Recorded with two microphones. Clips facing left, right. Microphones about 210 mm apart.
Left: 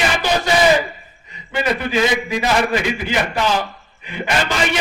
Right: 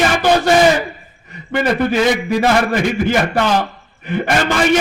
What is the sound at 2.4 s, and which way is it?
A man's voice, 50° right (ahead or behind).